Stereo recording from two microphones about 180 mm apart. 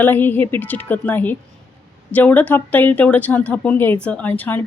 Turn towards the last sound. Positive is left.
turn(degrees=10)  # may be behind; listen again after turning